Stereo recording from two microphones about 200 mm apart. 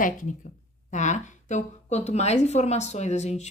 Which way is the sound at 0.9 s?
35° left (ahead or behind).